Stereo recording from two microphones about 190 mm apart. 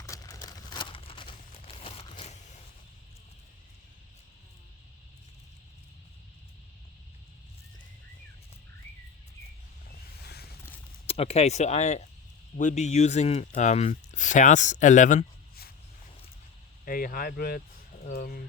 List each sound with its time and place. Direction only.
0.0 s a sound: 15° left (ahead or behind)
10.2 s creak: 55° left (ahead or behind)
11.0 s speech: 30° left (ahead or behind); by 15.7 s 45° left (ahead or behind)
16.8 s speech: 50° left (ahead or behind)